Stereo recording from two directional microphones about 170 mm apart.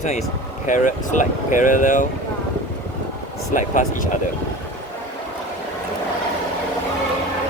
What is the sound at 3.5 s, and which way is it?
Speech, 50° left (ahead or behind).